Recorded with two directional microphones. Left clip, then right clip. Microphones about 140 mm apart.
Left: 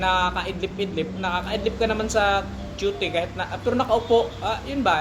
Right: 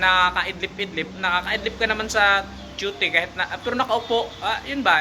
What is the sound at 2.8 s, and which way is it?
Speech, 10° left (ahead or behind).